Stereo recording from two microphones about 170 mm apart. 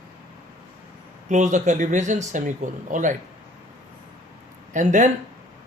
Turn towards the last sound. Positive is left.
turn(degrees=-45)  # may be behind; listen again after turning